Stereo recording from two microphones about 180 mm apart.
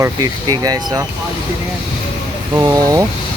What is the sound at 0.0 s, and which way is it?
Speech, 20° right (ahead or behind).